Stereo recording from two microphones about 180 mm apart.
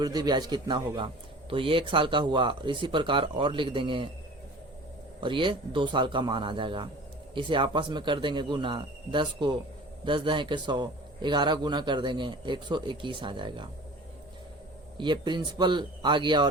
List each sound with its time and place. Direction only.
0.0 s a man's voice: 20° right (ahead or behind)
5.2 s a man's voice: 25° right (ahead or behind)
14.9 s a man's voice: 25° right (ahead or behind)